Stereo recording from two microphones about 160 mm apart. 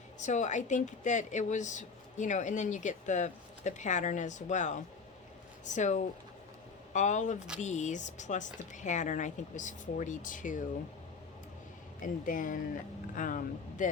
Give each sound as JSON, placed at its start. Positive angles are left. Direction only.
{"t": 0.2, "sound": "a woman's voice", "side_deg": 50}
{"t": 12.2, "sound": "speech", "side_deg": 55}